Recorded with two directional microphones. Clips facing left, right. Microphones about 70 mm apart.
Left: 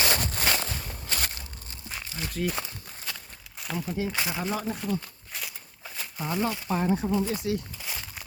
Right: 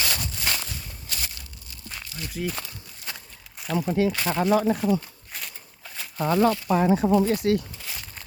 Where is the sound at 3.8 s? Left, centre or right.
Right.